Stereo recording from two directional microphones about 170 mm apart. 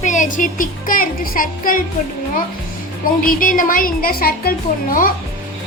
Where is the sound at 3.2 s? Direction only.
55° left (ahead or behind).